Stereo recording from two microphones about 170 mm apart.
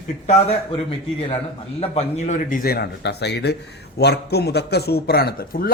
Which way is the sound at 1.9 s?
40° left (ahead or behind).